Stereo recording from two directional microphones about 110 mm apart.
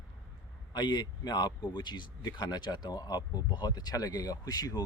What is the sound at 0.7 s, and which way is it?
Speech, 40° left (ahead or behind).